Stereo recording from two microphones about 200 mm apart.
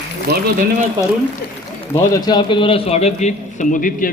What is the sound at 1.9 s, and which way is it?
A man's voice, 20° left (ahead or behind).